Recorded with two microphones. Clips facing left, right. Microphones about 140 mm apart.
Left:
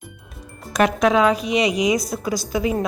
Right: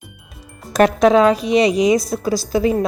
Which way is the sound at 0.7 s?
35° right (ahead or behind).